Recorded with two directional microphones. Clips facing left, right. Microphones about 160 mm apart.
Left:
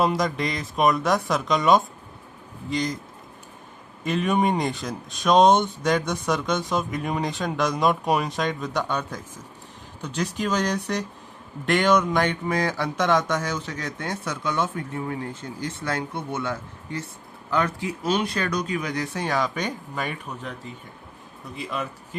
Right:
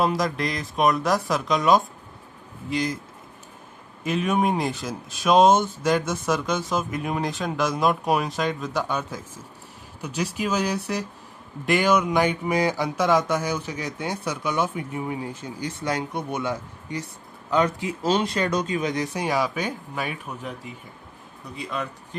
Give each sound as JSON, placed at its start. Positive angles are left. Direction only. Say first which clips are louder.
{"t": 0.0, "sound": "speech", "louder": "even", "side_deg": 0}
{"t": 4.0, "sound": "speech", "louder": "even", "side_deg": 0}